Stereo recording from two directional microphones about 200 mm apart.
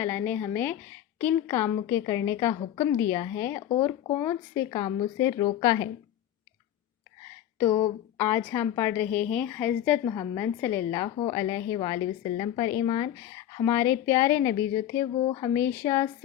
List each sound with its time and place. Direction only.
0.0 s a woman's voice: 10° left (ahead or behind)
8.2 s a woman's voice: 10° left (ahead or behind); by 15.4 s 25° left (ahead or behind)
15.5 s a woman's voice: 10° left (ahead or behind)